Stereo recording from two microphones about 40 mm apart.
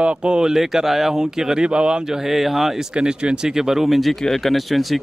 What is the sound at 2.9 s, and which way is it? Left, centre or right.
Speech, right.